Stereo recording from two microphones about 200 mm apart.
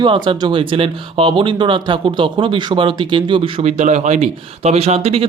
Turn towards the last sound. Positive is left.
turn(degrees=-30)  # may be behind; listen again after turning